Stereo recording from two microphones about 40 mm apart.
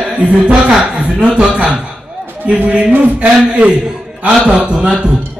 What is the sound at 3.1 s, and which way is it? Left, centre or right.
Speech, right.